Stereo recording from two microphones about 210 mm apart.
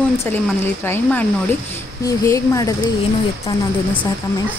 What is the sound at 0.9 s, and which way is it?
A woman's voice, 5° left (ahead or behind).